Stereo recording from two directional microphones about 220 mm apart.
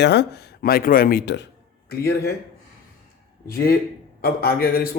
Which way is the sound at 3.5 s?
40° left (ahead or behind).